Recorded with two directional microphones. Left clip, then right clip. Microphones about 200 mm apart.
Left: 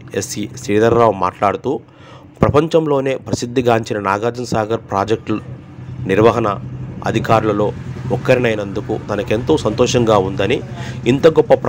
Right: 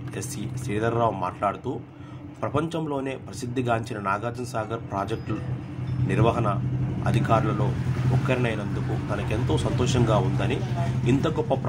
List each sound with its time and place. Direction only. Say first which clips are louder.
0.1 s a man's voice: left 14 dB; 45° left (ahead or behind)